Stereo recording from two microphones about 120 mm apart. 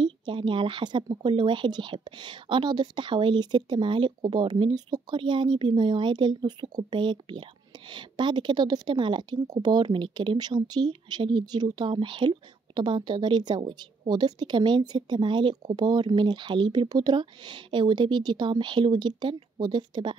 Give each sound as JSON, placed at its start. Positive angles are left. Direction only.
{"t": 0.0, "sound": "a woman's voice", "side_deg": -40}